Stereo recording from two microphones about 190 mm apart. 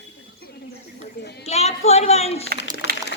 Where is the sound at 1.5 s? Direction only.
35° left (ahead or behind).